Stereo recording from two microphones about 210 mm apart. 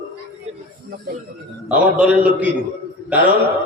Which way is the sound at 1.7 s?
5° right (ahead or behind).